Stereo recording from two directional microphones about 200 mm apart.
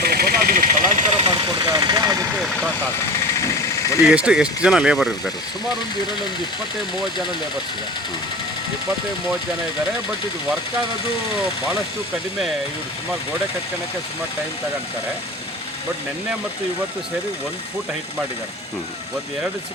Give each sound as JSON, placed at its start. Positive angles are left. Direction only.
{"t": 0.0, "sound": "vehicle", "side_deg": -50}
{"t": 1.1, "sound": "speech", "side_deg": -25}
{"t": 4.0, "sound": "speech", "side_deg": -5}